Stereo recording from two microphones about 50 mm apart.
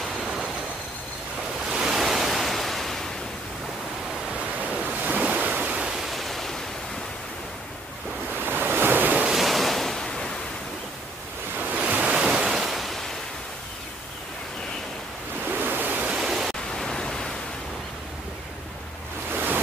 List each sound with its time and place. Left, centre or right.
0.1 s waves: centre
1.7 s waves: centre
4.7 s waves: right
5.9 s a sound: centre
8.4 s waves: right
9.3 s waves: centre
11.5 s waves: right
12.2 s waves: centre
15.5 s waves: right
16.2 s pink noise: centre
16.7 s pink noise: centre
19.3 s waves: right